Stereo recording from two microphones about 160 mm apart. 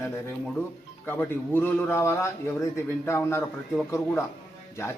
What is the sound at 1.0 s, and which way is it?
A man's voice, 15° left (ahead or behind).